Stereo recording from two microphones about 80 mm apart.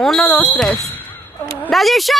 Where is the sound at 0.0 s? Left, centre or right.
Centre.